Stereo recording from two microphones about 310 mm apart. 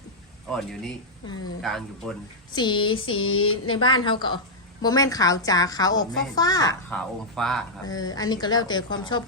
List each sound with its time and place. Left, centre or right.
1.6 s speech: centre
2.5 s a woman's voice: centre
3.1 s a sound: left
3.7 s a woman's voice: centre
7.9 s a woman's voice: centre